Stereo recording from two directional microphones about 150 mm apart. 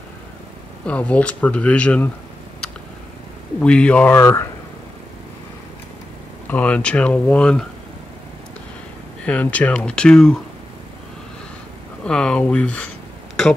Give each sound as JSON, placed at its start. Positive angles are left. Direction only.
{"t": 0.8, "sound": "speech", "side_deg": 10}
{"t": 3.6, "sound": "speech", "side_deg": 5}
{"t": 4.1, "sound": "speech", "side_deg": 20}
{"t": 6.5, "sound": "speech", "side_deg": 10}
{"t": 9.2, "sound": "speech", "side_deg": 10}
{"t": 12.0, "sound": "speech", "side_deg": 5}